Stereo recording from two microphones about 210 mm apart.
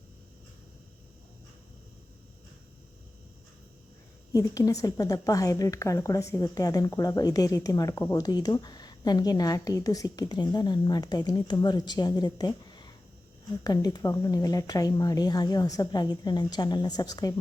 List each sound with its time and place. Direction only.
4.3 s speech: 15° left (ahead or behind)